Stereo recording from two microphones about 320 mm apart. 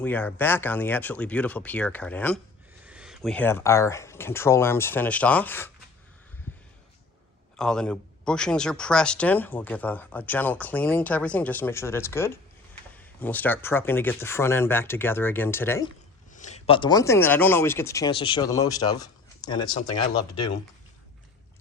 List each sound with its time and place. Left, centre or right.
0.0 s speech: centre
7.5 s speech: centre
16.3 s a sound: left
16.6 s speech: centre